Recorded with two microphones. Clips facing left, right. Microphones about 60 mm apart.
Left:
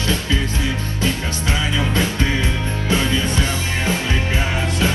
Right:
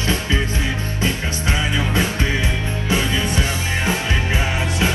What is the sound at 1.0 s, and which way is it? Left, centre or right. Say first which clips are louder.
Music: even; right.